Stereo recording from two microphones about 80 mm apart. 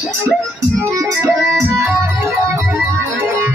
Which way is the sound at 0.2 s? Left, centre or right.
Right.